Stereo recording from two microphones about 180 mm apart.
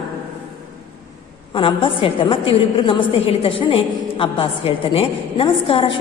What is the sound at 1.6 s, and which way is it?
A woman's voice, 30° left (ahead or behind).